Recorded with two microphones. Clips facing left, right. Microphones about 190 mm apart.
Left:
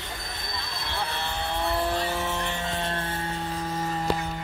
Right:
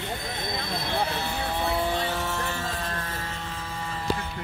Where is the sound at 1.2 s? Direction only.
5° right (ahead or behind); by 4.3 s 40° left (ahead or behind).